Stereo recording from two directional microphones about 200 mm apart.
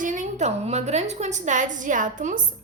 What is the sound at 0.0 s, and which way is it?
A woman's voice, 40° right (ahead or behind).